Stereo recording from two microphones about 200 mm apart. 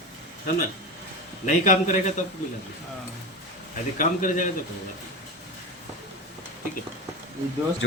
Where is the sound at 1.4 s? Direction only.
40° left (ahead or behind).